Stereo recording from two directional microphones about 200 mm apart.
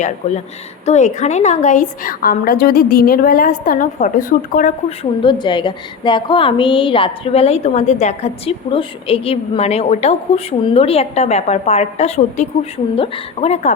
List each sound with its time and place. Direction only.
0.0 s a woman's voice: 35° left (ahead or behind)
5.2 s a woman's voice: 25° left (ahead or behind)